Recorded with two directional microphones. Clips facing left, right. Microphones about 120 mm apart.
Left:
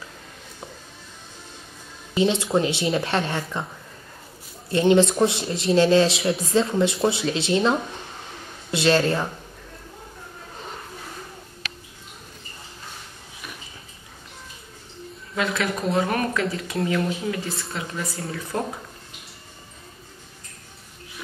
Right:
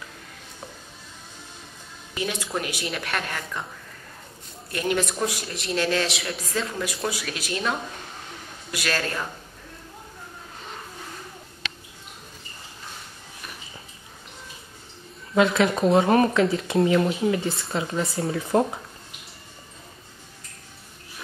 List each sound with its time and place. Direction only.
2.1 s a woman's voice: 25° left (ahead or behind)
4.6 s a woman's voice: 25° left (ahead or behind)
8.7 s a woman's voice: 25° left (ahead or behind)
15.3 s speech: 25° right (ahead or behind)
17.4 s speech: centre (ahead or behind)
17.7 s speech: 30° right (ahead or behind)